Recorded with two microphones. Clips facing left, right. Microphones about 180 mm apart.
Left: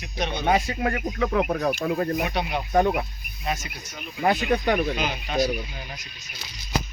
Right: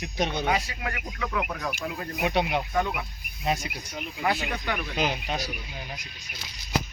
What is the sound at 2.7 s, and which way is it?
Speech, 40° left (ahead or behind).